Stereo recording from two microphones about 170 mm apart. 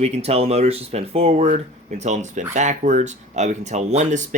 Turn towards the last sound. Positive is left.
turn(degrees=-45)  # may be behind; listen again after turning